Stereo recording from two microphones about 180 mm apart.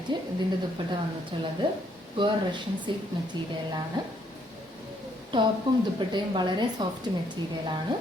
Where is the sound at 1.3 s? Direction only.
30° right (ahead or behind).